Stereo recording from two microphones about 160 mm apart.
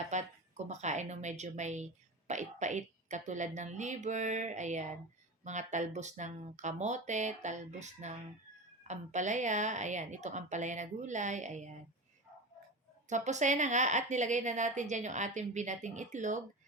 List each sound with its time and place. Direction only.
0.1 s a woman's voice: 45° right (ahead or behind)
13.1 s a woman's voice: 50° right (ahead or behind)